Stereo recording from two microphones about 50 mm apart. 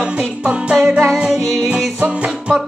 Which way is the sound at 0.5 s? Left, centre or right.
Right.